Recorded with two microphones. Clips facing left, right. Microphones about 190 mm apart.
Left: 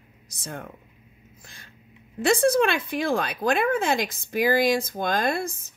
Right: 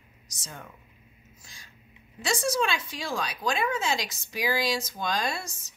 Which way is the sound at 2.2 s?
55° left (ahead or behind).